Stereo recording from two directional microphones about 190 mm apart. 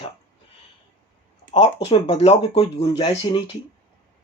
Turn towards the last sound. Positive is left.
turn(degrees=25)  # may be behind; listen again after turning